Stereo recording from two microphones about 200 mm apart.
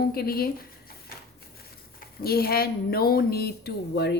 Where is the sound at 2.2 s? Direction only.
50° left (ahead or behind).